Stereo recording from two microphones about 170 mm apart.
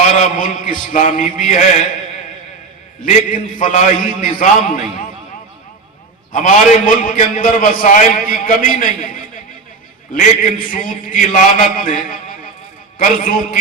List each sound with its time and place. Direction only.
0.2 s a man's voice: 50° left (ahead or behind)
3.0 s a man's voice: 50° left (ahead or behind)
6.3 s a man's voice: 50° left (ahead or behind)
10.2 s a man's voice: 55° left (ahead or behind)
13.0 s a man's voice: 55° left (ahead or behind)